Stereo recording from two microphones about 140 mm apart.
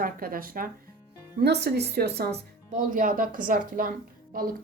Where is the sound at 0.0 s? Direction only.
90° right.